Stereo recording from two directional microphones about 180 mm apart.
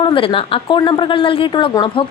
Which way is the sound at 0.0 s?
30° left (ahead or behind).